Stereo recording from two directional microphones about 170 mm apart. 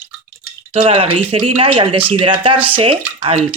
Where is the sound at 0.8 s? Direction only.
35° right (ahead or behind).